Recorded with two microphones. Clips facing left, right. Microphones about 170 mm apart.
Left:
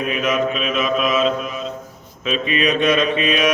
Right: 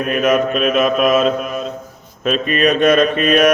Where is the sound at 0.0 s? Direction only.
50° right (ahead or behind).